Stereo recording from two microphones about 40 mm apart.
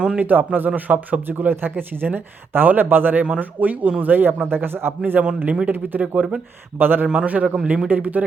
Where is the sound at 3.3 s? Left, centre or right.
Right.